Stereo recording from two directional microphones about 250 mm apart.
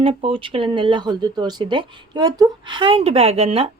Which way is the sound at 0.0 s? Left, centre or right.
Right.